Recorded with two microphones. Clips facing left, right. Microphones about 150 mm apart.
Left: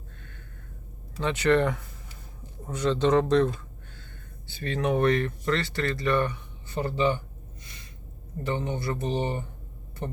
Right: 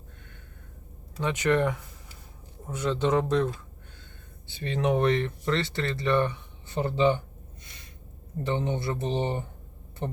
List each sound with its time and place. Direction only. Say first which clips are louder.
1.2 s speech: left 2 dB; 10° right (ahead or behind)
4.4 s speech: right 1 dB; 20° right (ahead or behind)
8.4 s speech: right 1 dB; 25° right (ahead or behind)